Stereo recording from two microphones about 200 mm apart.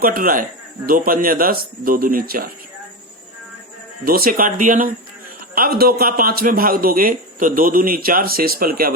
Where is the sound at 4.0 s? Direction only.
50° right (ahead or behind).